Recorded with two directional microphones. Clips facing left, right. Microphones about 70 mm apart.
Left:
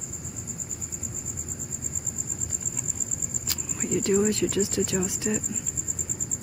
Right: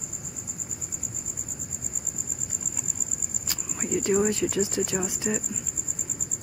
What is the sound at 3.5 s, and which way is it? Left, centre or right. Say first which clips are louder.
Speech: even; centre.